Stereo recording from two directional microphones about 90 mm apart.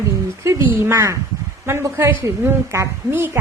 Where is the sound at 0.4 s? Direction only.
30° right (ahead or behind).